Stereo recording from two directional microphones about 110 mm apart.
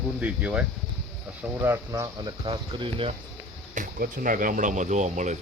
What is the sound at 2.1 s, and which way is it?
Speech, 45° right (ahead or behind).